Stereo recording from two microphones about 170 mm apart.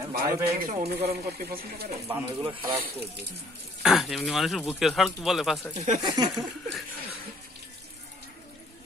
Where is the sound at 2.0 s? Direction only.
10° right (ahead or behind).